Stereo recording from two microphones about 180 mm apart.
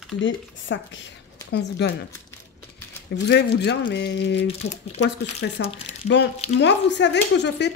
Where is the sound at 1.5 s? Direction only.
70° left (ahead or behind).